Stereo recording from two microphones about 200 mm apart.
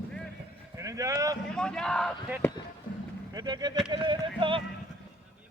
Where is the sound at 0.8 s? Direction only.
15° right (ahead or behind).